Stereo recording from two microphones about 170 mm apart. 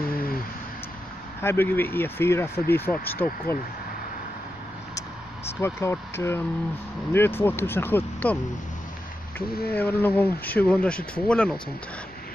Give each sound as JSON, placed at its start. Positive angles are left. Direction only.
{"t": 0.0, "sound": "a sound", "side_deg": 60}
{"t": 1.4, "sound": "speech", "side_deg": 15}
{"t": 5.6, "sound": "speech", "side_deg": 15}
{"t": 9.5, "sound": "speech", "side_deg": 65}
{"t": 10.0, "sound": "speech", "side_deg": 10}